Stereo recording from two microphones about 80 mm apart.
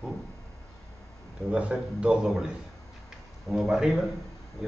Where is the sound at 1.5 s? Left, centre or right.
Centre.